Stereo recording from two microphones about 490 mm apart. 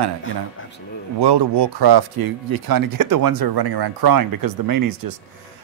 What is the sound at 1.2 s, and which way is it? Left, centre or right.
Speech, right.